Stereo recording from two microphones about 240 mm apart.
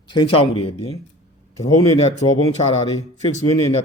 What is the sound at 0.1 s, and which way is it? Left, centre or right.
Speech, left.